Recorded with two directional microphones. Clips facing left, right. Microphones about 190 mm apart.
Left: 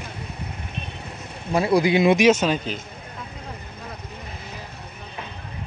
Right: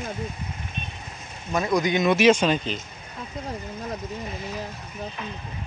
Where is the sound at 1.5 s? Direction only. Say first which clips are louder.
Left 4 dB; 30° left (ahead or behind).